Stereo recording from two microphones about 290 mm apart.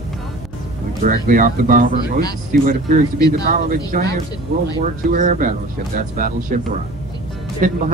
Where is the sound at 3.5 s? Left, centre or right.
Right.